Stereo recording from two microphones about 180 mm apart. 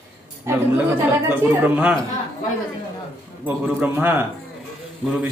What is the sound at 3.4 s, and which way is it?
Speech, 10° right (ahead or behind).